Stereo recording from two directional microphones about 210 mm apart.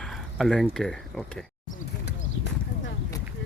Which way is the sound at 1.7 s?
40° left (ahead or behind).